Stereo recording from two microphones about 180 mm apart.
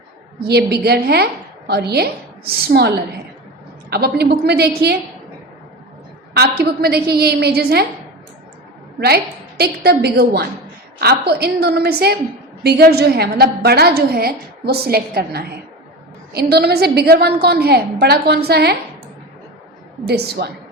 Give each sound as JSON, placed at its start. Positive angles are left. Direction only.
{"t": 0.3, "sound": "a woman's voice", "side_deg": -65}
{"t": 6.3, "sound": "a woman's voice", "side_deg": -60}
{"t": 9.0, "sound": "a woman's voice", "side_deg": -60}
{"t": 20.1, "sound": "a woman's voice", "side_deg": -60}